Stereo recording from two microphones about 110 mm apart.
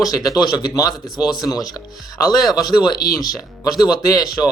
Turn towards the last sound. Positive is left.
turn(degrees=35)  # may be behind; listen again after turning